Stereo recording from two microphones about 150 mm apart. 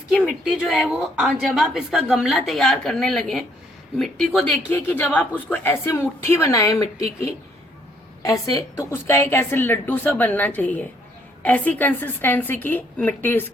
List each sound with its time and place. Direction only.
0.7 s a woman's voice: 5° right (ahead or behind)
4.7 s a woman's voice: 15° left (ahead or behind)